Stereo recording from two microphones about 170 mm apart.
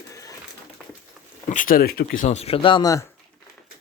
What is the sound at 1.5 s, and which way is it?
Speech, 50° left (ahead or behind).